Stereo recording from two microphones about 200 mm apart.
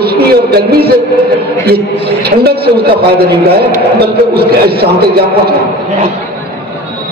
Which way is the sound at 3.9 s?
50° right (ahead or behind).